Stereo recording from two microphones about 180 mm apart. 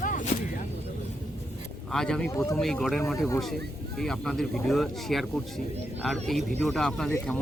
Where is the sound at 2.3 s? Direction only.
15° left (ahead or behind).